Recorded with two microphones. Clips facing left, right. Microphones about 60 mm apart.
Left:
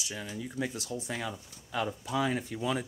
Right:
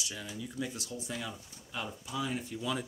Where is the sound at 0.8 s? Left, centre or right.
Left.